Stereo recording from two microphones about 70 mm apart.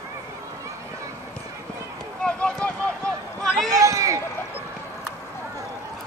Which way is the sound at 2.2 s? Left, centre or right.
Centre.